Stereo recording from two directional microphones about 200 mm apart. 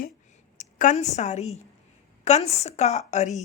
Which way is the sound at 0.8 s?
40° left (ahead or behind).